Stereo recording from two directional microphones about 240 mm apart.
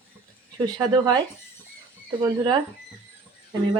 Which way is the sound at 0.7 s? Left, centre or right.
Centre.